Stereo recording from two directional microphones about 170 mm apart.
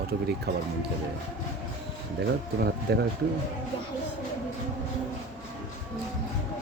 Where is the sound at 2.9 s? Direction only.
70° right (ahead or behind).